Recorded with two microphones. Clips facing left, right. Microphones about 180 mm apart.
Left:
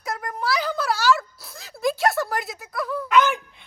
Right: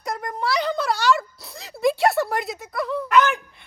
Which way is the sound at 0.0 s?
Centre (ahead or behind).